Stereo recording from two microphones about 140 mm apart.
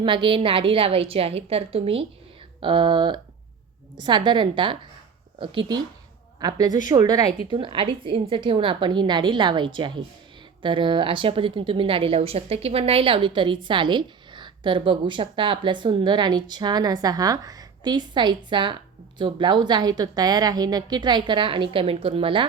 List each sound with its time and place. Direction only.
0.0 s a woman's voice: 35° right (ahead or behind)